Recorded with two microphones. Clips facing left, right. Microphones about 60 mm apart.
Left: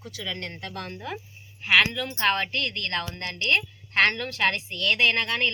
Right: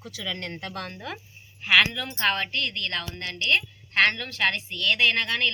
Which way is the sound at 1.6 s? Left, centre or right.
Left.